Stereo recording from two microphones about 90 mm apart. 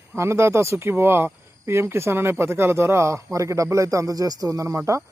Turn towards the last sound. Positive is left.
turn(degrees=-35)  # may be behind; listen again after turning